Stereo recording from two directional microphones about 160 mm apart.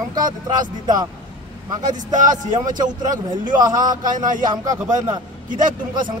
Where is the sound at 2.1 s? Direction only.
50° right (ahead or behind).